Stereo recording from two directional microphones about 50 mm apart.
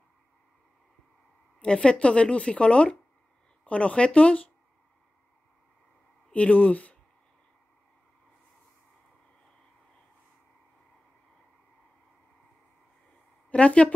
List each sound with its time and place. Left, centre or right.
1.6 s speech: centre
6.3 s speech: left
13.5 s speech: left